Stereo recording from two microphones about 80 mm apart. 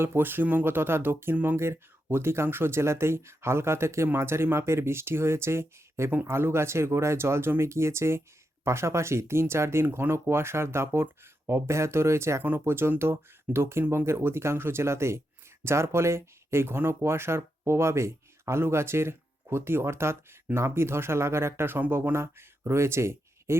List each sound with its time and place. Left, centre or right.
0.0 s speech: right